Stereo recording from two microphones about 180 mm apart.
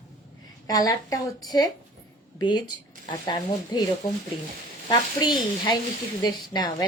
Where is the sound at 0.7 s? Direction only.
20° left (ahead or behind).